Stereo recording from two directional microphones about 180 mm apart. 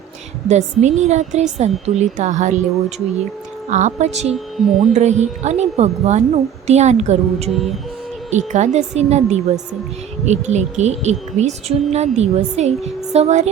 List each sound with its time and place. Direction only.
0.4 s speech: 40° right (ahead or behind)
3.7 s speech: 40° right (ahead or behind)
4.5 s speech: centre (ahead or behind)
4.8 s speech: 40° right (ahead or behind)